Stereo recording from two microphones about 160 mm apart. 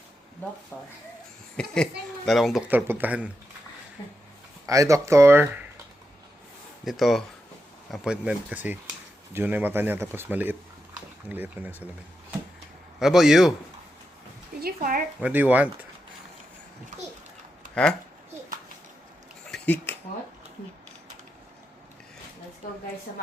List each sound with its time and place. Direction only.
1.5 s speech: 5° left (ahead or behind)
2.6 s speech: 15° right (ahead or behind)
4.6 s speech: 20° right (ahead or behind)
6.8 s speech: centre (ahead or behind)
13.0 s speech: 5° right (ahead or behind)
14.6 s speech: 60° right (ahead or behind)
15.2 s speech: 10° right (ahead or behind)
19.5 s a sound: 5° left (ahead or behind)